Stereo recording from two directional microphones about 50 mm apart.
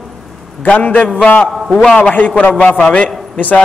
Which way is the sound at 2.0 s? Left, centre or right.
Left.